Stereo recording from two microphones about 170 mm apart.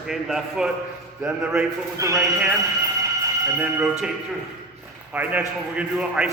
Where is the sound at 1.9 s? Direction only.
20° right (ahead or behind).